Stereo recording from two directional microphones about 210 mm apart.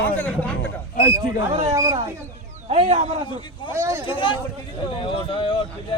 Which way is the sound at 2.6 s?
30° right (ahead or behind).